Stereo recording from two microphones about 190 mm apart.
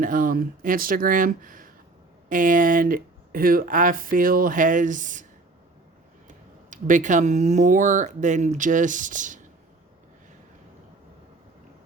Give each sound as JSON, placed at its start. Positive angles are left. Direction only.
{"t": 0.0, "sound": "speech", "side_deg": -45}
{"t": 6.2, "sound": "speech", "side_deg": -45}